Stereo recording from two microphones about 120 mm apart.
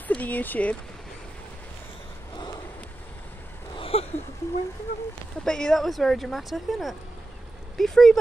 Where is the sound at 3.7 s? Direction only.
50° left (ahead or behind).